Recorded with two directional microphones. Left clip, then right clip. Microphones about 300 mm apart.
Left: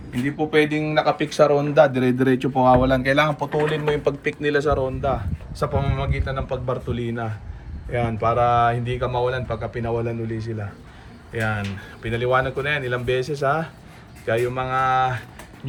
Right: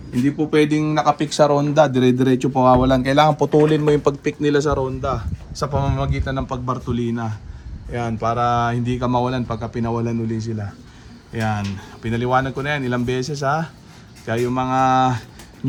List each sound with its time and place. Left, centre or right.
0.3 s speech: centre